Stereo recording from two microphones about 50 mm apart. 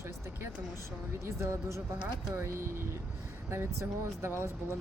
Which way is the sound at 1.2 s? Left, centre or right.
Right.